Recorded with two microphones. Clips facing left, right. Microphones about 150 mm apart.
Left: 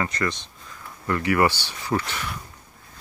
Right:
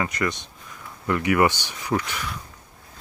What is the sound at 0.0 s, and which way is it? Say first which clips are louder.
Speech: right 1 dB; 15° right (ahead or behind).